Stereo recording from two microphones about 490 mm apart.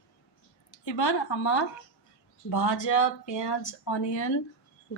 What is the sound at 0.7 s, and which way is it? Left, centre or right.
A woman's voice, left.